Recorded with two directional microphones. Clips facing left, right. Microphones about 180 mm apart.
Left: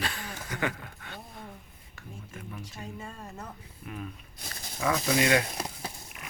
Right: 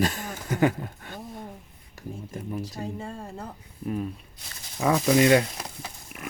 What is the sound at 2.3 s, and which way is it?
Speech, 35° right (ahead or behind).